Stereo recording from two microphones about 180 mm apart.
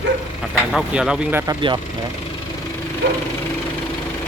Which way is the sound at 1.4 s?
25° right (ahead or behind).